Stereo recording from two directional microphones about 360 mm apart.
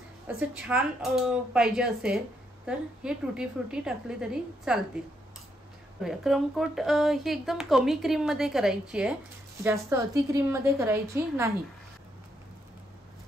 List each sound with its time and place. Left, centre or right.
0.4 s speech: centre
6.0 s a woman's voice: centre